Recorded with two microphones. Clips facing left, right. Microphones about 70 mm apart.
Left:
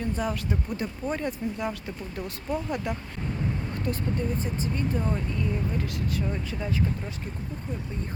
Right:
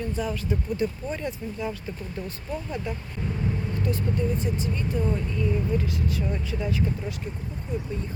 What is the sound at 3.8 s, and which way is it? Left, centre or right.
Speech, left.